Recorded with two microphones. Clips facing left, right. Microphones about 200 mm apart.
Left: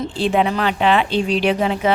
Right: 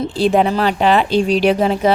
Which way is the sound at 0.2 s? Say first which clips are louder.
Right 4 dB; 40° right (ahead or behind).